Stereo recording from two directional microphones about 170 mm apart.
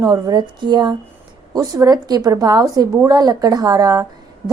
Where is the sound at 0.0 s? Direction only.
20° right (ahead or behind).